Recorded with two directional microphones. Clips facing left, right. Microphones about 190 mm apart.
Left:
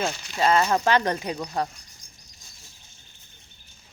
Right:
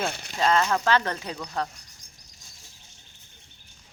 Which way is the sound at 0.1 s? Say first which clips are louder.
Left 1 dB; 60° right (ahead or behind).